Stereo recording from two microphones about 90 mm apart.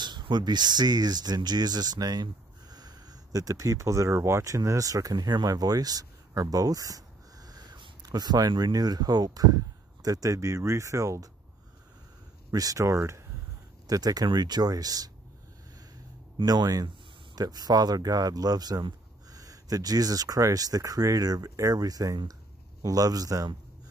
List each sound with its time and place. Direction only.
0.0 s speech: 55° right (ahead or behind); by 11.2 s 35° right (ahead or behind)
12.4 s speech: 40° right (ahead or behind)
13.8 s speech: 45° right (ahead or behind)
16.4 s speech: 45° right (ahead or behind)